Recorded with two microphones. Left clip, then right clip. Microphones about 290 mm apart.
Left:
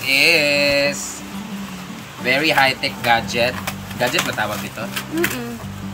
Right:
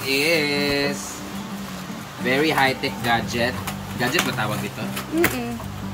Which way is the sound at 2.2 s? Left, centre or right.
Centre.